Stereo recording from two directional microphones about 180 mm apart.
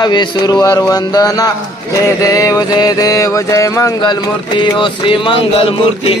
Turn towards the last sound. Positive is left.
turn(degrees=30)  # may be behind; listen again after turning